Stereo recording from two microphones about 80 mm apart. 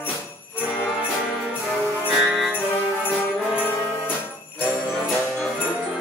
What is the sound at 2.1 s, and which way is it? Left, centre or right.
Music, centre.